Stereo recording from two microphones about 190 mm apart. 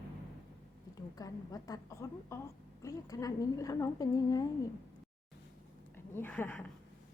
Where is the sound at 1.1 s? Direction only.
20° left (ahead or behind).